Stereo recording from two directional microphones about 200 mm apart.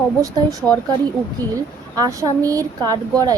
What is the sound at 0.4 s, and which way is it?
Speech, 20° right (ahead or behind).